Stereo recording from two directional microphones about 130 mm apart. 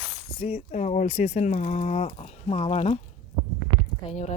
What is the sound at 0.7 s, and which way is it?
Speech, 70° left (ahead or behind).